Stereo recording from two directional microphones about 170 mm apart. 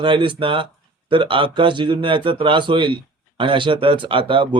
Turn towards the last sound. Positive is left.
turn(degrees=-30)  # may be behind; listen again after turning